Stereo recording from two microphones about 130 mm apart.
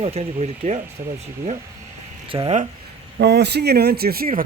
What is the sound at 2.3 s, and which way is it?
Speech, 35° right (ahead or behind).